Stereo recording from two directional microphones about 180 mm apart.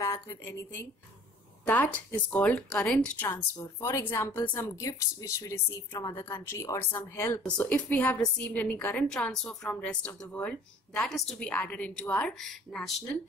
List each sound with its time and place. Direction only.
0.0 s a woman's voice: 15° left (ahead or behind)